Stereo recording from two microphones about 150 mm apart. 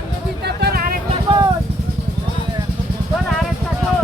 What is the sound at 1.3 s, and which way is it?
Vehicle, 30° right (ahead or behind).